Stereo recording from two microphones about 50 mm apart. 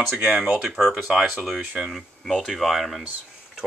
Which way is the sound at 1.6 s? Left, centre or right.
Right.